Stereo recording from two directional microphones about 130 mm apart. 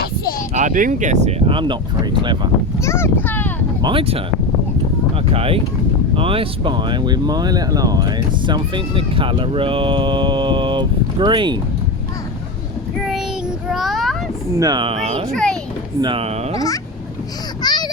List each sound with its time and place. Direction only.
0.5 s speech: 80° right; by 1.4 s 60° right (ahead or behind)
1.5 s speech: 40° right (ahead or behind)
2.8 s speech: 20° left (ahead or behind)
3.8 s speech: 35° right (ahead or behind)
5.3 s speech: 45° right (ahead or behind)
13.0 s child singing: centre (ahead or behind)
13.7 s a sound: centre (ahead or behind)
14.5 s speech: 30° right (ahead or behind)
14.9 s a child's voice: 55° right (ahead or behind)
15.3 s a child's voice: 5° left (ahead or behind)
16.0 s speech: 40° right (ahead or behind)
16.6 s a child's voice: 25° left (ahead or behind)
17.6 s a sound: 30° left (ahead or behind)